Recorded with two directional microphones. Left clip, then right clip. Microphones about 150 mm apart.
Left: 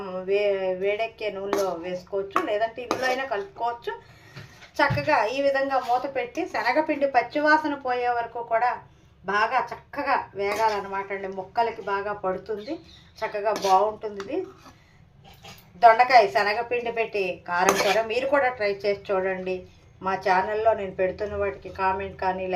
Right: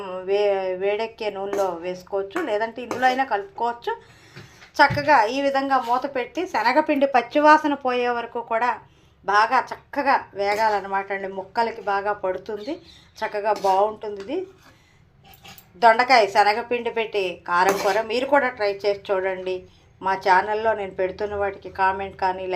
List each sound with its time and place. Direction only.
0.0 s a woman's voice: 15° right (ahead or behind)
15.8 s speech: 25° right (ahead or behind)